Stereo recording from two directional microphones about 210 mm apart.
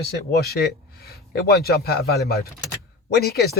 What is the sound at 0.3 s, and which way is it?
Speech, 50° left (ahead or behind).